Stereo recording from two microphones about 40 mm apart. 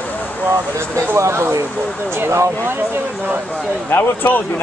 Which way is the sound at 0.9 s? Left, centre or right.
Right.